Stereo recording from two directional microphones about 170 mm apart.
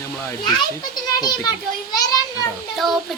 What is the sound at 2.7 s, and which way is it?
Music, centre (ahead or behind).